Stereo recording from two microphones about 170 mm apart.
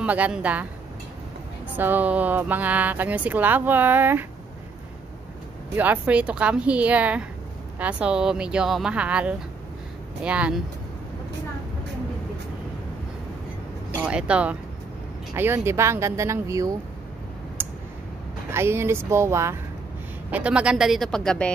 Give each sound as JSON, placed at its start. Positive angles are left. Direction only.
{"t": 0.0, "sound": "speech", "side_deg": -10}
{"t": 1.8, "sound": "speech", "side_deg": -10}
{"t": 5.8, "sound": "speech", "side_deg": -10}
{"t": 13.9, "sound": "speech", "side_deg": -5}
{"t": 17.6, "sound": "a sound", "side_deg": -10}
{"t": 18.5, "sound": "speech", "side_deg": -15}